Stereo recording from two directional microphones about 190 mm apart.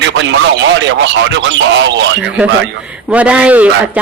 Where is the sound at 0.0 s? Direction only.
70° right (ahead or behind).